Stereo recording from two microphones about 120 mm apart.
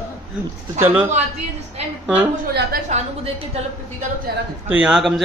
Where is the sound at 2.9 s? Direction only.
70° right (ahead or behind).